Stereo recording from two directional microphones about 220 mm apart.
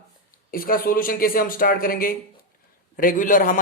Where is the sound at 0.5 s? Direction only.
40° left (ahead or behind).